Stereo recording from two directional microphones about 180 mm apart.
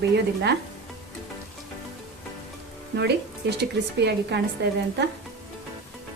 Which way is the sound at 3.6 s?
70° right (ahead or behind).